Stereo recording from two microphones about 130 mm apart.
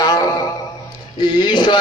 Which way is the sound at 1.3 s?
35° left (ahead or behind).